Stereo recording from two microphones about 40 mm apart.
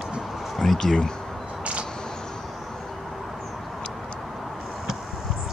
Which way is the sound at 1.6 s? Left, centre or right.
Right.